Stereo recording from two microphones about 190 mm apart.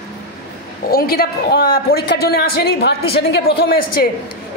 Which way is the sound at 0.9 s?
50° left (ahead or behind).